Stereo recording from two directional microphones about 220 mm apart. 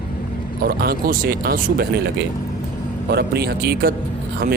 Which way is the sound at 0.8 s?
45° right (ahead or behind).